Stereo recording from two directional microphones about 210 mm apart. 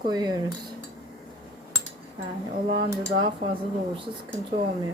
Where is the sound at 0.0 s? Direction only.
20° right (ahead or behind).